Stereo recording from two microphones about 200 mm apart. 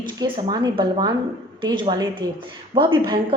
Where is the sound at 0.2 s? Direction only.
20° right (ahead or behind).